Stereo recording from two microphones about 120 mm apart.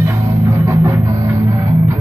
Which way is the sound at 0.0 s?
25° right (ahead or behind).